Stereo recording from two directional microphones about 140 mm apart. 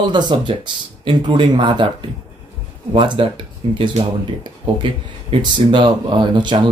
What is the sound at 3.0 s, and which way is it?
Speech, 35° right (ahead or behind).